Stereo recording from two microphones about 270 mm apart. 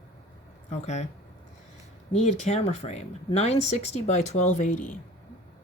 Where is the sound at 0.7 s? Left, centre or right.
Left.